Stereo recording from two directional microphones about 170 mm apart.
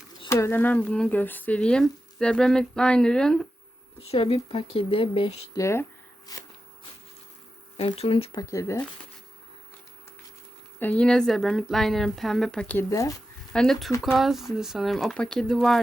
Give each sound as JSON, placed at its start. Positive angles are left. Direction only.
{"t": 0.3, "sound": "speech", "side_deg": 15}
{"t": 4.0, "sound": "speech", "side_deg": 35}
{"t": 5.5, "sound": "speech", "side_deg": 15}
{"t": 6.3, "sound": "a sound", "side_deg": 20}
{"t": 7.8, "sound": "speech", "side_deg": 35}
{"t": 8.4, "sound": "speech", "side_deg": 20}
{"t": 10.8, "sound": "speech", "side_deg": 10}
{"t": 13.5, "sound": "speech", "side_deg": 5}